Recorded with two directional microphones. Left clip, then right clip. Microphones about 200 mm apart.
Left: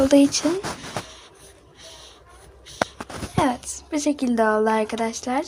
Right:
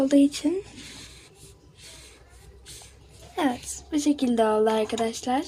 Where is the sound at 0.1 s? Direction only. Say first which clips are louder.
Left 4 dB; 10° left (ahead or behind).